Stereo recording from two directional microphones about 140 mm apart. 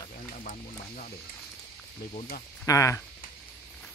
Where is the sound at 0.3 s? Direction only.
65° left (ahead or behind).